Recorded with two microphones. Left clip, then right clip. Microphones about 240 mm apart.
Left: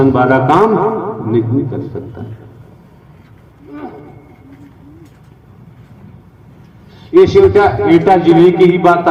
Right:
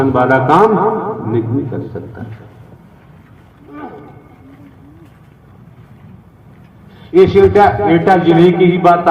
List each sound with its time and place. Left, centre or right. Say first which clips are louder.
0.0 s a man's voice: left 1 dB; left
7.1 s a man's voice: left 1 dB; left